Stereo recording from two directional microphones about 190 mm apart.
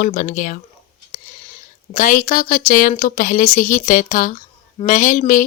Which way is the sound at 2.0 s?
45° left (ahead or behind).